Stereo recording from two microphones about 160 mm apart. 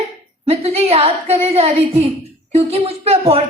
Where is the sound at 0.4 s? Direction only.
40° right (ahead or behind).